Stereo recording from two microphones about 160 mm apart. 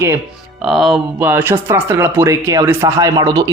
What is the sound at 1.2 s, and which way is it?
Speech, 10° right (ahead or behind).